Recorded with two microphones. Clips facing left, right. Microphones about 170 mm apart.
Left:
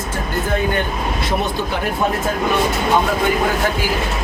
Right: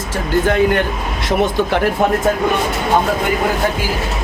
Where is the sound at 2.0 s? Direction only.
70° right (ahead or behind).